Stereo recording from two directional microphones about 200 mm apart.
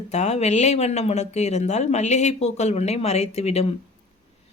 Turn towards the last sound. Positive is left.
turn(degrees=30)  # may be behind; listen again after turning